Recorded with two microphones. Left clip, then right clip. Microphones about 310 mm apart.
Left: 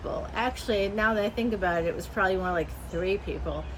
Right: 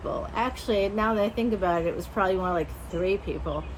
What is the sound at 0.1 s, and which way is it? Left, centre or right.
A woman's voice, centre.